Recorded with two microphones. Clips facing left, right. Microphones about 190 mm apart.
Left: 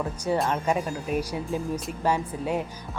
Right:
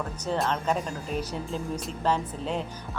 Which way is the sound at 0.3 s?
10° left (ahead or behind).